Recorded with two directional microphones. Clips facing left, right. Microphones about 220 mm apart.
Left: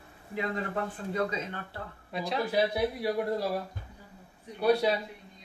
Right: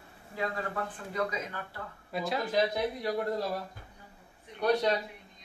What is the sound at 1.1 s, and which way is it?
Speech, 30° left (ahead or behind).